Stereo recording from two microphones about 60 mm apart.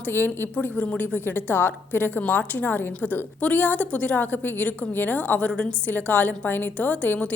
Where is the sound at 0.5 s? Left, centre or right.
Left.